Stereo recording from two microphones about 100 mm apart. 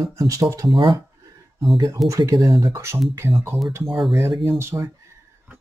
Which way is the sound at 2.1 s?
35° right (ahead or behind).